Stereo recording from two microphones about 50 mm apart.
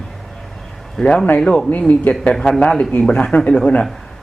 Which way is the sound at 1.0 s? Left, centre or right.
Centre.